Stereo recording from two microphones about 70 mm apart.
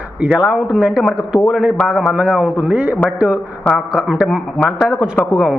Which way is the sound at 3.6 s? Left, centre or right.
Centre.